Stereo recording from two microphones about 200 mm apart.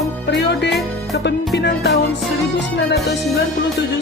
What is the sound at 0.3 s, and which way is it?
Music, 60° left (ahead or behind).